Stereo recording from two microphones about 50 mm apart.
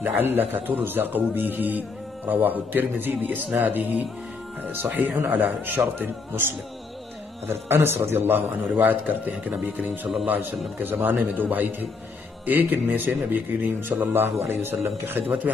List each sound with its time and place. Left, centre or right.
0.0 s a man's voice: right
5.9 s a man's voice: right
12.4 s a man's voice: right